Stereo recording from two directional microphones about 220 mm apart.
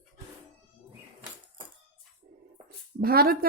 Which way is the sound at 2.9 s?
45° right (ahead or behind).